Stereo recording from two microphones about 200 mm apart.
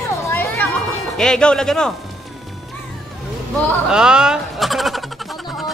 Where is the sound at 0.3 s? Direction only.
10° left (ahead or behind).